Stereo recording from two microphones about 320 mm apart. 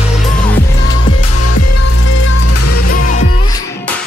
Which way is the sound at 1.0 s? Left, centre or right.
Left.